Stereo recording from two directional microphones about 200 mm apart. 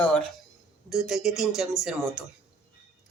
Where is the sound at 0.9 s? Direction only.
Centre (ahead or behind).